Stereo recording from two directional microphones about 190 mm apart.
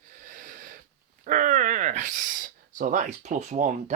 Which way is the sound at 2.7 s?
40° right (ahead or behind).